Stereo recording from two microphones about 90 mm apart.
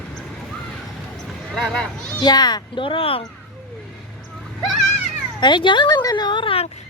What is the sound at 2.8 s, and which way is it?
Speech, 85° left.